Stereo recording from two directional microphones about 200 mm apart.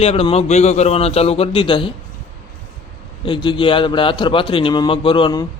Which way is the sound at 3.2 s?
25° left (ahead or behind).